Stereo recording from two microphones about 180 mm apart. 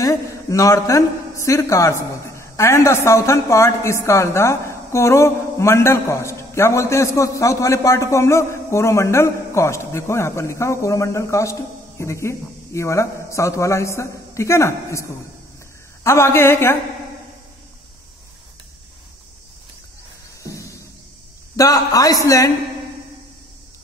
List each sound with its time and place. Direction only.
0.0 s a man's voice: 15° left (ahead or behind)
20.4 s a sound: 15° left (ahead or behind)
21.5 s a man's voice: 20° left (ahead or behind)